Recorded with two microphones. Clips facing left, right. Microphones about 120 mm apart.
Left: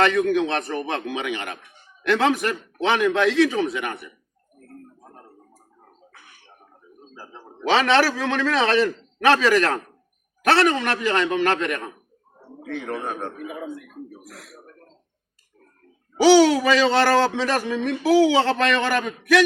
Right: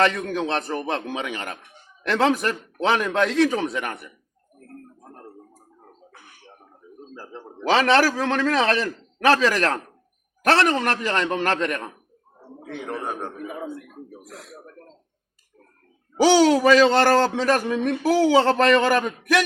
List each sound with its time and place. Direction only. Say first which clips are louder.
0.3 s a man's voice: left 3 dB; 35° right (ahead or behind)
7.6 s a man's voice: even; 40° right (ahead or behind)
16.2 s a man's voice: left 1 dB; 45° right (ahead or behind)